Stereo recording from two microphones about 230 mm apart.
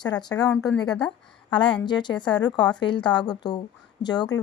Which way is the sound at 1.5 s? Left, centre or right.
Left.